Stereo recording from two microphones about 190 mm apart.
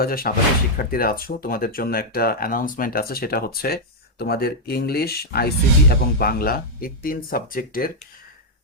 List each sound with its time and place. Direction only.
0.0 s speech: 50° left (ahead or behind)